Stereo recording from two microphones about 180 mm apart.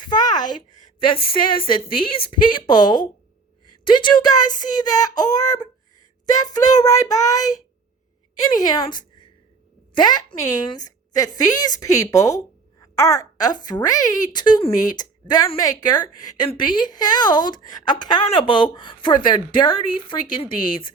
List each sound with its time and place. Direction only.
0.0 s a woman's voice: 25° left (ahead or behind)